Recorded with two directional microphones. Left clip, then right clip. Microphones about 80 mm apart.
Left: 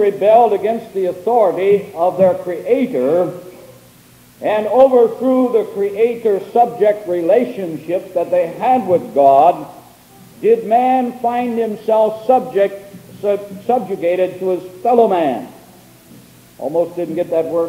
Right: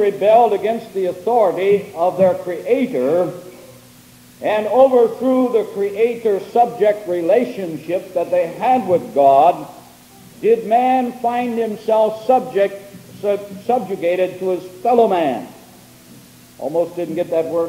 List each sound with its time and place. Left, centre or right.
0.0 s a man's voice: left
4.4 s a man's voice: left
16.6 s a man's voice: left